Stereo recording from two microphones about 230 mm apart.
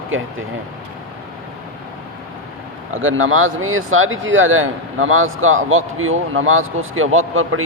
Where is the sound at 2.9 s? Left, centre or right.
Right.